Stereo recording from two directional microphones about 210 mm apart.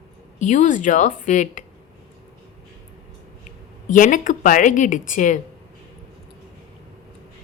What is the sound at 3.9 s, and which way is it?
A woman's voice, 40° left (ahead or behind).